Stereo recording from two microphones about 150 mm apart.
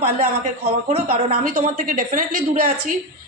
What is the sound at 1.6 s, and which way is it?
A woman's voice, 60° right (ahead or behind).